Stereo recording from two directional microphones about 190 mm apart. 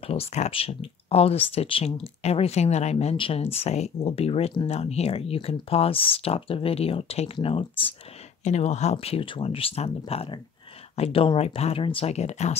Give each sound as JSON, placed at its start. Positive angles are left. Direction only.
{"t": 0.0, "sound": "speech", "side_deg": 30}